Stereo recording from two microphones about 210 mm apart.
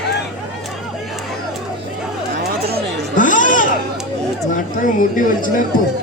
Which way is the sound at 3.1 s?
40° left (ahead or behind).